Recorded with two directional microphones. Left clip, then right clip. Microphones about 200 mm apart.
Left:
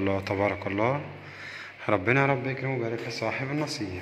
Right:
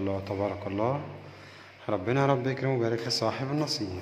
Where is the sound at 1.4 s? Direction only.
5° left (ahead or behind).